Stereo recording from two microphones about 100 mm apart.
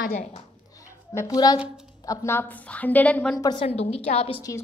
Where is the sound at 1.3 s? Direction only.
40° left (ahead or behind).